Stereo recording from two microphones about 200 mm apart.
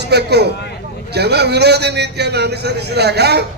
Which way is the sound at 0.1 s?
55° right (ahead or behind).